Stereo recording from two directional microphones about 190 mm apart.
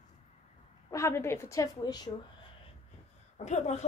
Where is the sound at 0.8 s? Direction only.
15° left (ahead or behind).